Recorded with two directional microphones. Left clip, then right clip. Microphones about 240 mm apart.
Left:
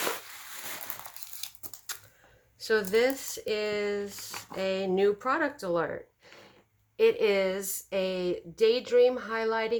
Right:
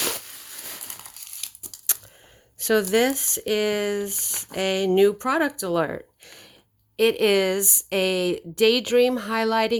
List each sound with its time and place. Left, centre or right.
2.6 s speech: right